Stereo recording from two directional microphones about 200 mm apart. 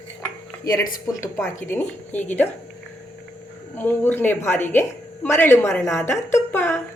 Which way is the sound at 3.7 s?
10° left (ahead or behind).